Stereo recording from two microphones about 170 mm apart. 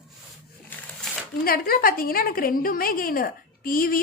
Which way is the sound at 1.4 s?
60° left (ahead or behind).